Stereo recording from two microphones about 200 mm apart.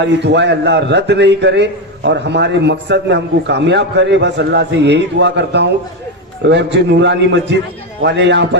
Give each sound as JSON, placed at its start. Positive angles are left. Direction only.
{"t": 0.0, "sound": "a man's voice", "side_deg": -60}